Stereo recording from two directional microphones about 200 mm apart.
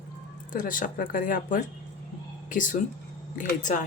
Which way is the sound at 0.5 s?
45° left (ahead or behind).